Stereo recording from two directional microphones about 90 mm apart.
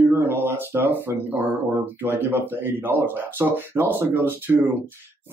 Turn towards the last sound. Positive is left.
turn(degrees=-25)  # may be behind; listen again after turning